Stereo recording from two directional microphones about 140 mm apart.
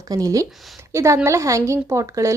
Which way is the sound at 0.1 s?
25° right (ahead or behind).